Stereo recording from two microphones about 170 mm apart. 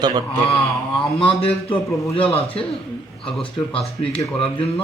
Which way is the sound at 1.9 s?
20° left (ahead or behind).